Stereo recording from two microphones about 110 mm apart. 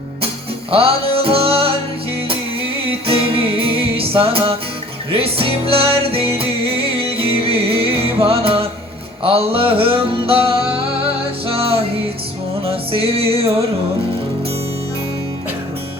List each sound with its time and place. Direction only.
0.7 s music: 60° right (ahead or behind)
3.1 s music: 60° right (ahead or behind)